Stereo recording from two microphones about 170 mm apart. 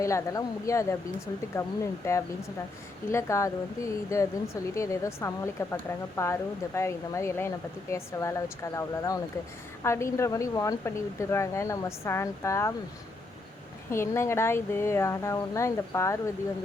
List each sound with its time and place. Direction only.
0.0 s speech: 20° left (ahead or behind)
13.9 s speech: 15° left (ahead or behind)